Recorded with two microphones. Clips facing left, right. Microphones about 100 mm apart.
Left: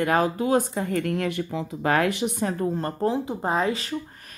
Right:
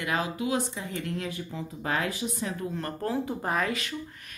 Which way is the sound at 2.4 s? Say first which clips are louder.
Left 8 dB; 40° left (ahead or behind).